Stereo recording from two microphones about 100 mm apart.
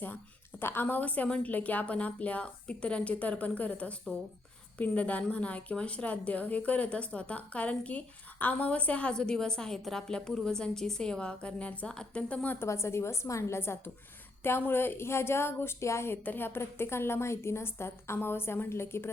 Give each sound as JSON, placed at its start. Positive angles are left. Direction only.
{"t": 0.6, "sound": "a woman's voice", "side_deg": 20}
{"t": 12.6, "sound": "a woman's voice", "side_deg": 25}